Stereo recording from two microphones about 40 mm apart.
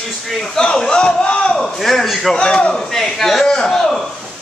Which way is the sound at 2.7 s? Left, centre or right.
Centre.